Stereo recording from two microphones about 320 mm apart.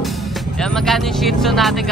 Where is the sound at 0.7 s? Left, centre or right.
Centre.